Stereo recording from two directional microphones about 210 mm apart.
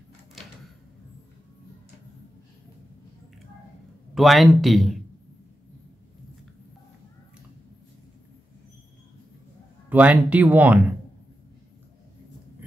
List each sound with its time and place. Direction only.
4.1 s speech: centre (ahead or behind)
9.8 s speech: 5° right (ahead or behind)